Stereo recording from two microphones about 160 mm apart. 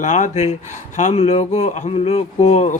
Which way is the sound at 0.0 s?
50° left (ahead or behind).